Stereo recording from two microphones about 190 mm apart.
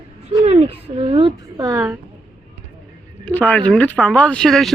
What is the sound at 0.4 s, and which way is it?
A woman's voice, 35° right (ahead or behind).